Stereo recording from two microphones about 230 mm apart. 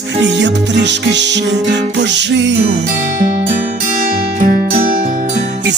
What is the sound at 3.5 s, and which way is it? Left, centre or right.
Music, right.